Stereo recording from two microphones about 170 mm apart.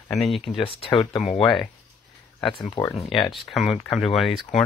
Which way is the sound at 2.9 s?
Centre (ahead or behind).